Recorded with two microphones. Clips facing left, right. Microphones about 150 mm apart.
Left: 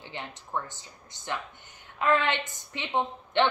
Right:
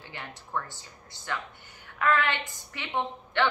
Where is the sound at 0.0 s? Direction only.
20° left (ahead or behind).